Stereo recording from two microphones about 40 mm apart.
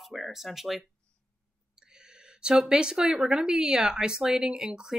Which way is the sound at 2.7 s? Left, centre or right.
Centre.